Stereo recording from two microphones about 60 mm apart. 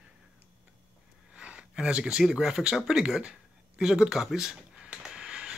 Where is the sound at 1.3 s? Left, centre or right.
Centre.